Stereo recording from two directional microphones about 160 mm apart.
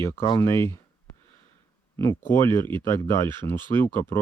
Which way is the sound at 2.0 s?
15° left (ahead or behind).